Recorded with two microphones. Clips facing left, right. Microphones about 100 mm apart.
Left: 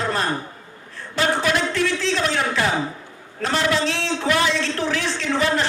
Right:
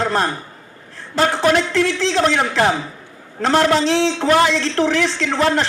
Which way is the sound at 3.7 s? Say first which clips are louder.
Right 6 dB; 90° right.